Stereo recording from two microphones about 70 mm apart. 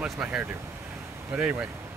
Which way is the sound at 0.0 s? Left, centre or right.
Centre.